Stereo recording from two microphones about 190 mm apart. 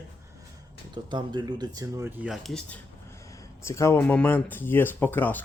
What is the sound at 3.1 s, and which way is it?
Speech, 15° left (ahead or behind).